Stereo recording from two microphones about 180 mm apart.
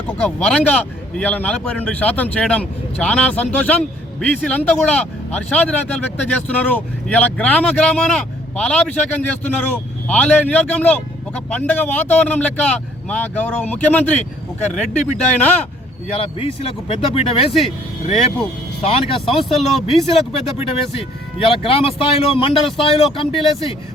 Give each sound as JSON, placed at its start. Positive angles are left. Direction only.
{"t": 0.2, "sound": "a man's voice", "side_deg": 5}
{"t": 16.1, "sound": "speech", "side_deg": 30}
{"t": 18.8, "sound": "speech", "side_deg": 35}
{"t": 19.4, "sound": "speech", "side_deg": 0}
{"t": 20.1, "sound": "speech", "side_deg": 30}